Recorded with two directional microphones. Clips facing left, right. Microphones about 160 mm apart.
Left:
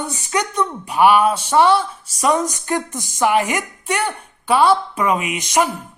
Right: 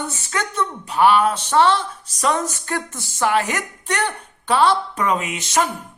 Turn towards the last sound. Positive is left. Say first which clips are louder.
# left 2 dB
turn(degrees=15)  # may be behind; listen again after turning